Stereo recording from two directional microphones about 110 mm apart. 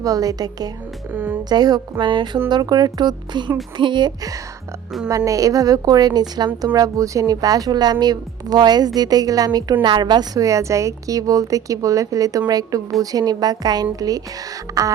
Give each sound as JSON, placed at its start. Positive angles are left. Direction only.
{"t": 0.0, "sound": "a woman's voice", "side_deg": -35}
{"t": 1.1, "sound": "speech", "side_deg": -15}
{"t": 1.5, "sound": "a woman's voice", "side_deg": -40}